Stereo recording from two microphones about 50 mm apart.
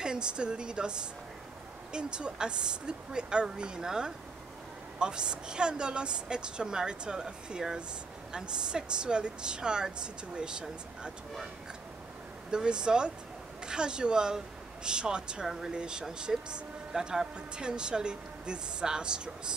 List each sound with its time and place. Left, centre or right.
0.0 s speech: centre
12.4 s speech: centre
15.4 s speech: centre